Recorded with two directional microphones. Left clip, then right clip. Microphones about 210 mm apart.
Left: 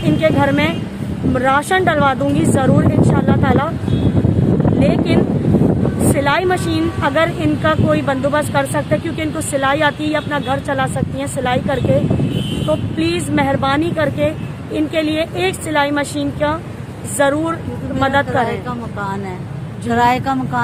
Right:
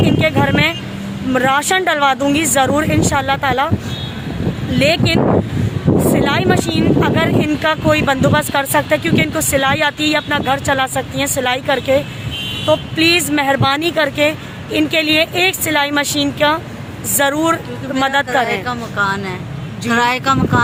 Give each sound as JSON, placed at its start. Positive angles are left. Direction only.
{"t": 0.0, "sound": "vehicle", "side_deg": -10}
{"t": 1.3, "sound": "speech", "side_deg": -10}
{"t": 4.8, "sound": "speech", "side_deg": -10}
{"t": 13.0, "sound": "speech", "side_deg": -10}
{"t": 18.4, "sound": "speech", "side_deg": 15}